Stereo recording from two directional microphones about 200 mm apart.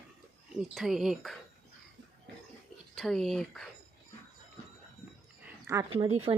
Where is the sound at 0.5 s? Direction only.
Centre (ahead or behind).